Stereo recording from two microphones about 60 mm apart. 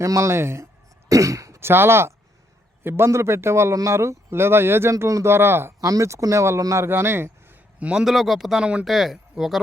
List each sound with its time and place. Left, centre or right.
0.0 s speech: right
1.0 s cough: right
1.5 s speech: right
5.8 s speech: right
6.7 s speech: right
7.8 s a man's voice: centre
8.0 s speech: centre
8.6 s speech: centre
8.9 s speech: centre